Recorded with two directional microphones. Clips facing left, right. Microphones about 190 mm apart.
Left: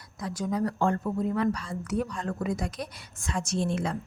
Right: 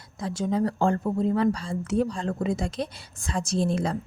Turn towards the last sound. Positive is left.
turn(degrees=-35)  # may be behind; listen again after turning